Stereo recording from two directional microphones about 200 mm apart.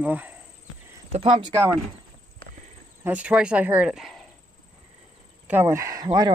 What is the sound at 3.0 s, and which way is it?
Speech, 5° right (ahead or behind).